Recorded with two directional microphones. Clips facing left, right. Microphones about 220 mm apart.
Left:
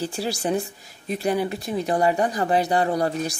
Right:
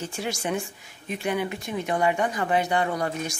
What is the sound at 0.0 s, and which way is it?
Speech, 35° left (ahead or behind).